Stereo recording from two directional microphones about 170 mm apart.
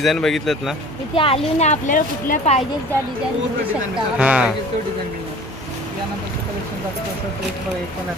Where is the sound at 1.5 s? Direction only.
45° left (ahead or behind).